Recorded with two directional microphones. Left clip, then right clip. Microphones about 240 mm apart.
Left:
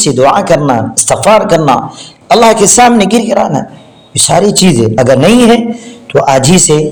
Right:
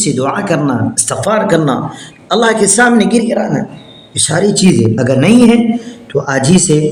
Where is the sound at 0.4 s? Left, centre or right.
Left.